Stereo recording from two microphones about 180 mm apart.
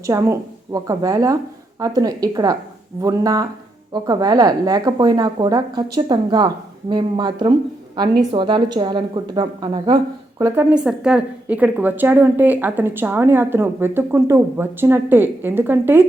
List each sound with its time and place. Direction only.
0.0 s a woman's voice: 15° right (ahead or behind)
10.4 s a woman's voice: 10° right (ahead or behind)